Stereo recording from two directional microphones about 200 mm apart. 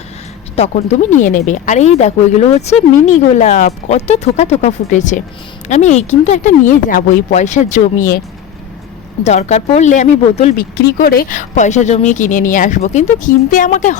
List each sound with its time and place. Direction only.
0.5 s speech: 35° left (ahead or behind)
9.2 s speech: 35° left (ahead or behind)
10.8 s speech: 50° left (ahead or behind)